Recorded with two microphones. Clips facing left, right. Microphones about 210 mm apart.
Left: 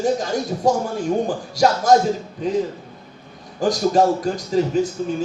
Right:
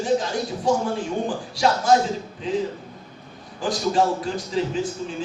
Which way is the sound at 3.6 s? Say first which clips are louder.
Left 5 dB; 40° left (ahead or behind).